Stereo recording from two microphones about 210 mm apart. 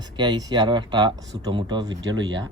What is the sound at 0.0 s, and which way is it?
Speech, 20° right (ahead or behind).